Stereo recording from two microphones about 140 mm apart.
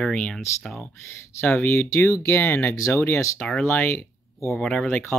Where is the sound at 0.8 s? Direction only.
20° left (ahead or behind).